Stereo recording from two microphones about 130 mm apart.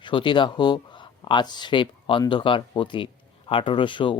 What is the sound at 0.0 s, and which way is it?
Speech, 40° left (ahead or behind).